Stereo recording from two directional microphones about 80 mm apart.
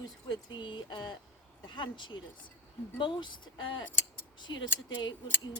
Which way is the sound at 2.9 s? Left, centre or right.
Left.